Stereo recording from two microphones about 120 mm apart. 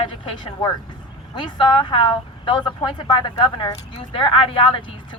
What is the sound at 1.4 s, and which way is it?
A woman's voice, 40° left (ahead or behind).